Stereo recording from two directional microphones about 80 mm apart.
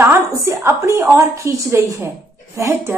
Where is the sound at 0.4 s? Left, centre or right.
Right.